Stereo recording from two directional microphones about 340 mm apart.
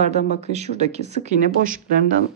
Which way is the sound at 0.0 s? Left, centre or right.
Centre.